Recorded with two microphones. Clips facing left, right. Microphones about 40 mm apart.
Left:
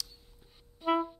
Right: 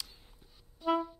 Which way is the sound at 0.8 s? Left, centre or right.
Left.